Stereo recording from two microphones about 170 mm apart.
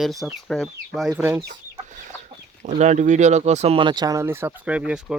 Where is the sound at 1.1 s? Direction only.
10° right (ahead or behind).